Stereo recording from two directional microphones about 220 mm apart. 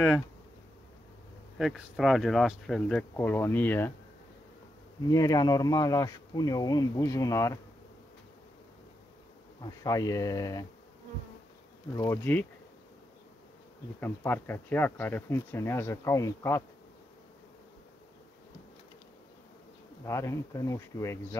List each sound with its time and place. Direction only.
1.6 s speech: centre (ahead or behind)
5.0 s speech: 15° left (ahead or behind)
9.6 s speech: 15° left (ahead or behind)
12.0 s speech: 10° left (ahead or behind)
13.9 s speech: 10° left (ahead or behind)
20.1 s speech: 15° left (ahead or behind)